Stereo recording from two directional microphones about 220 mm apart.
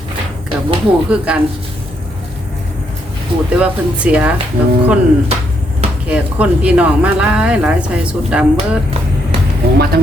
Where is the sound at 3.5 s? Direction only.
5° right (ahead or behind).